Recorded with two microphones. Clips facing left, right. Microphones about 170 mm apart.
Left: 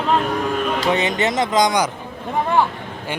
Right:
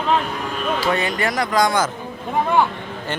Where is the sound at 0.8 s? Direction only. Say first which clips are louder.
Left 1 dB; 20° left (ahead or behind).